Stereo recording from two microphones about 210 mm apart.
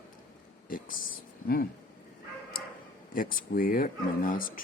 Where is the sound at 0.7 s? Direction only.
40° left (ahead or behind).